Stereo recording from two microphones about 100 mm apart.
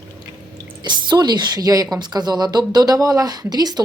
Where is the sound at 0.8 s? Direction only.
45° right (ahead or behind).